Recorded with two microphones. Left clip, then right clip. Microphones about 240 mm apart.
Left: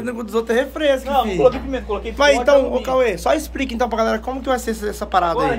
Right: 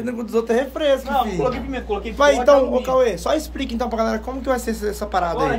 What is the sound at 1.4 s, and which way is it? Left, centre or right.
Speech, left.